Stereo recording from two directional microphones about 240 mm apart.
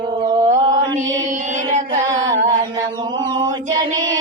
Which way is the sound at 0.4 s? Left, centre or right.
Right.